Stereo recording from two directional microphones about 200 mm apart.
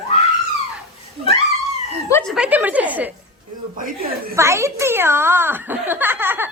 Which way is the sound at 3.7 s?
45° right (ahead or behind).